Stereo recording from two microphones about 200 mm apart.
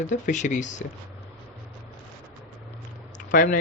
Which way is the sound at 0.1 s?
40° left (ahead or behind).